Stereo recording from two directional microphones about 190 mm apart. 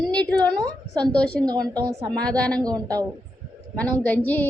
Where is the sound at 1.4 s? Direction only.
20° right (ahead or behind).